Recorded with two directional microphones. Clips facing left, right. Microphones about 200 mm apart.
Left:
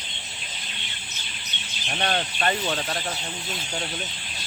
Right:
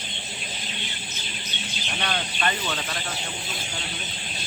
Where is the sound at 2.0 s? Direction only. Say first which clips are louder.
Left 3 dB; 40° left (ahead or behind).